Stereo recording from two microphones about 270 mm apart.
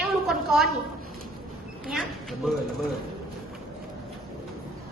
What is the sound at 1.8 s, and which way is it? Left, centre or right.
Speech, centre.